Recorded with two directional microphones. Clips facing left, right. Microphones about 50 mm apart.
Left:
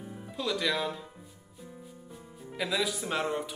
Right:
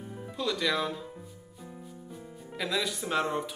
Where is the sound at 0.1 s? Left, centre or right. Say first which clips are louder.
Right 2 dB; centre.